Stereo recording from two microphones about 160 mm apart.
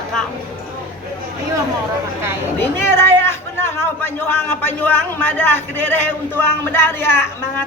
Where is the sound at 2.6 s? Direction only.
15° left (ahead or behind).